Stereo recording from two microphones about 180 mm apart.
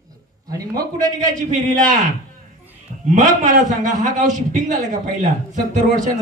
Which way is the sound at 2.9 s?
40° right (ahead or behind).